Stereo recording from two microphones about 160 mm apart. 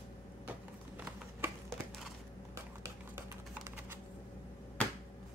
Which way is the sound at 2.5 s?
15° right (ahead or behind).